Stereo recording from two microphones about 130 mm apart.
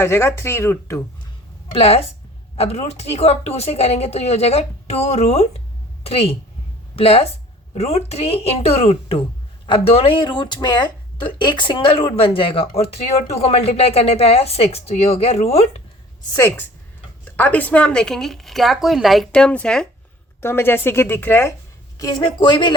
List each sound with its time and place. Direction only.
0.0 s speech: 20° left (ahead or behind)
2.6 s a woman's voice: 55° left (ahead or behind)
16.3 s speech: 20° left (ahead or behind)
20.4 s speech: 20° left (ahead or behind)
21.9 s a woman's voice: 30° left (ahead or behind)